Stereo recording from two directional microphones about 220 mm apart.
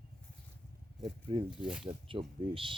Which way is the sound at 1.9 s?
25° right (ahead or behind).